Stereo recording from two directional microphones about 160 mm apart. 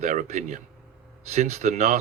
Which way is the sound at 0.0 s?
50° right (ahead or behind).